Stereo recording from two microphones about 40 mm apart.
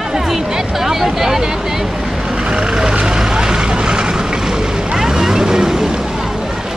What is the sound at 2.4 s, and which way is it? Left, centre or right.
Vehicle, centre.